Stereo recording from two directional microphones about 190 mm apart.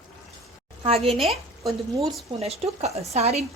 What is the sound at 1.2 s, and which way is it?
Speech, centre (ahead or behind).